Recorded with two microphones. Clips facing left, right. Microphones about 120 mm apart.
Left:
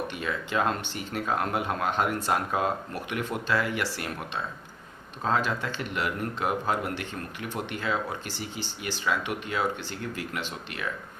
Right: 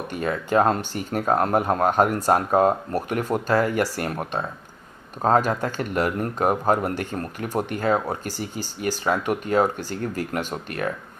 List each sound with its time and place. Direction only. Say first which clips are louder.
0.1 s speech: right 8 dB; 40° right (ahead or behind)